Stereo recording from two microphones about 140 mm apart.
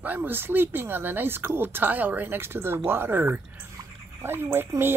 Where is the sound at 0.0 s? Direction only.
15° right (ahead or behind).